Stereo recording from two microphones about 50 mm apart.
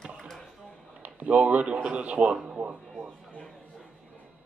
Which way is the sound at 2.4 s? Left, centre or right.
Centre.